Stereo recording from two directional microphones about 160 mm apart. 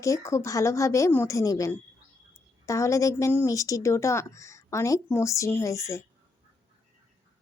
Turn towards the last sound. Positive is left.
turn(degrees=15)  # may be behind; listen again after turning